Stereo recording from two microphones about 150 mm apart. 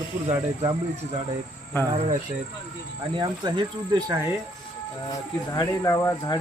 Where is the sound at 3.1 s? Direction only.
35° right (ahead or behind).